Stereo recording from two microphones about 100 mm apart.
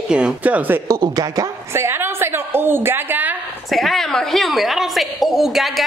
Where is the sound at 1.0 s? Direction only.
40° right (ahead or behind).